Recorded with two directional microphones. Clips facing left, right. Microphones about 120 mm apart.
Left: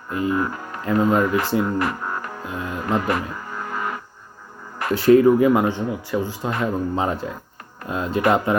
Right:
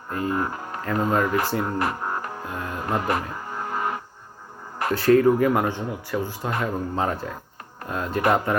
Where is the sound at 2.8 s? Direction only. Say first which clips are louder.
Left 3 dB; 35° right (ahead or behind).